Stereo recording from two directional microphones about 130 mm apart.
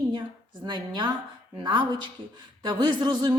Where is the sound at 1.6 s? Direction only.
40° right (ahead or behind).